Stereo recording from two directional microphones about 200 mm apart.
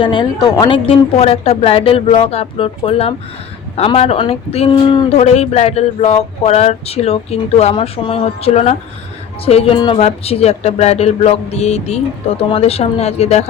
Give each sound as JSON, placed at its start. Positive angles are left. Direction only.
{"t": 0.0, "sound": "a woman's voice", "side_deg": 25}